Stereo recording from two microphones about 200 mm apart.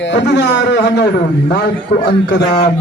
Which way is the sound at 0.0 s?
60° left (ahead or behind).